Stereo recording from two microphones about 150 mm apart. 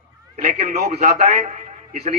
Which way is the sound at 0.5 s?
60° right (ahead or behind).